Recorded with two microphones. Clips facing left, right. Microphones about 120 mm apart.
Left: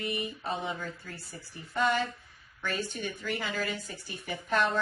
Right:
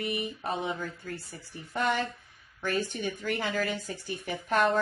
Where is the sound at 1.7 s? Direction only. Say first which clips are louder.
Left 1 dB; 50° right (ahead or behind).